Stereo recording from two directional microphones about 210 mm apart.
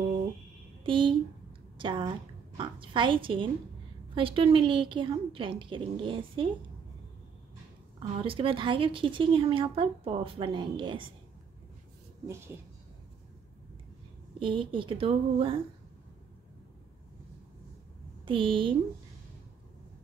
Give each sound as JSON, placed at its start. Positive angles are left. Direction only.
{"t": 0.8, "sound": "a sound", "side_deg": -25}
{"t": 1.8, "sound": "a woman's voice", "side_deg": -25}
{"t": 2.5, "sound": "a sound", "side_deg": -25}
{"t": 4.1, "sound": "a woman's voice", "side_deg": -25}
{"t": 8.1, "sound": "a woman's voice", "side_deg": -25}
{"t": 14.4, "sound": "a woman's voice", "side_deg": -25}
{"t": 18.2, "sound": "a woman's voice", "side_deg": -25}